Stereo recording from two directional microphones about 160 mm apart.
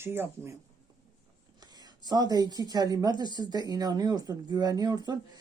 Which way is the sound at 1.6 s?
25° right (ahead or behind).